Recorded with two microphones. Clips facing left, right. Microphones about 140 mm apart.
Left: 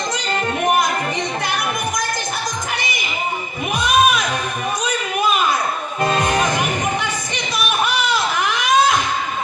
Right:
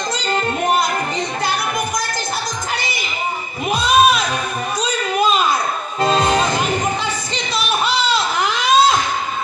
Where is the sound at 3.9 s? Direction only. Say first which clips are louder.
Right 2 dB; 30° right (ahead or behind).